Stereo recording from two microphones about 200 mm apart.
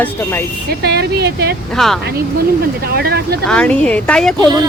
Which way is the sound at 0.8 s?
55° right (ahead or behind).